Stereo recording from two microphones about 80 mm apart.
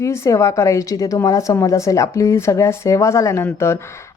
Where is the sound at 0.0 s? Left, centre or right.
Left.